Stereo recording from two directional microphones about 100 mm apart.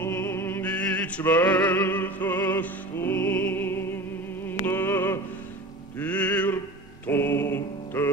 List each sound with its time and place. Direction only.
0.0 s music: 25° left (ahead or behind)
7.1 s mantra: 20° left (ahead or behind)